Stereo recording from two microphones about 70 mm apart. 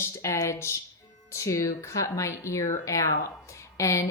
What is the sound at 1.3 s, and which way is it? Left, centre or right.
A woman's voice, left.